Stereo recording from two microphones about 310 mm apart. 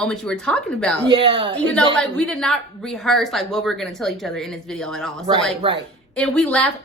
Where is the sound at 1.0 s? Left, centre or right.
Centre.